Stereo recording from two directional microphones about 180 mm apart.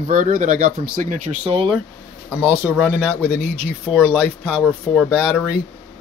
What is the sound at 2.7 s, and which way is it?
Speech, centre (ahead or behind).